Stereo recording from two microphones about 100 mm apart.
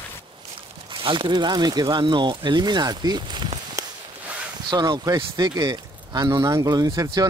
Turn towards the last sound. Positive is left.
turn(degrees=-35)  # may be behind; listen again after turning